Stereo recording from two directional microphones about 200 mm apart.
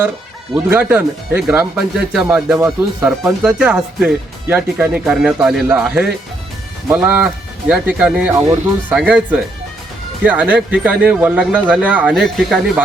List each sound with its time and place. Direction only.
0.5 s speech: 10° right (ahead or behind)